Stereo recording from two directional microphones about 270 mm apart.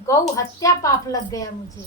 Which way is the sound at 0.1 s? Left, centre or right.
Centre.